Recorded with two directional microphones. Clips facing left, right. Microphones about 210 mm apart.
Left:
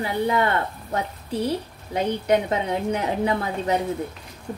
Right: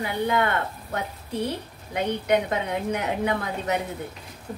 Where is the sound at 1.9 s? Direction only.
30° left (ahead or behind).